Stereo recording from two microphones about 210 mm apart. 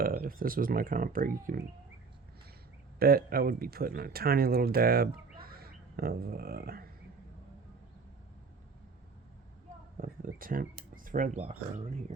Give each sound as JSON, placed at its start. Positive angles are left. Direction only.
{"t": 0.0, "sound": "a man's voice", "side_deg": -45}
{"t": 3.0, "sound": "a man's voice", "side_deg": -45}
{"t": 10.0, "sound": "speech", "side_deg": -45}